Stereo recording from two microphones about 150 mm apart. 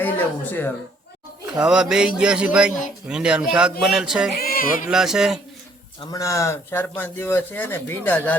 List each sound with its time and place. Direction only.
0.0 s a sound: 15° left (ahead or behind)
1.5 s a man's voice: 5° right (ahead or behind)
4.4 s speech: 75° left (ahead or behind)
4.9 s a man's voice: 5° right (ahead or behind)
6.0 s speech: 25° left (ahead or behind)